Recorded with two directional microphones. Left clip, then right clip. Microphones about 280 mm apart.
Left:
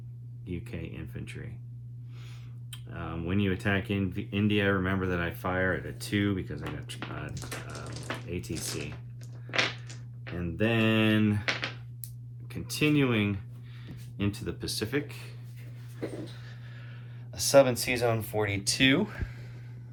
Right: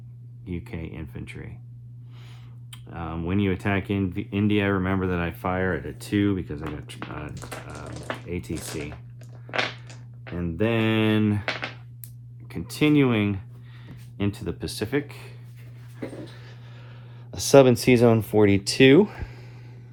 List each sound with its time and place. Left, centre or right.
0.4 s speech: right
2.6 s speech: right
10.2 s speech: right
17.3 s speech: right